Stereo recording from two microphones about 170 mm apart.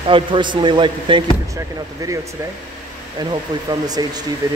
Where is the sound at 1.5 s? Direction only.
20° right (ahead or behind).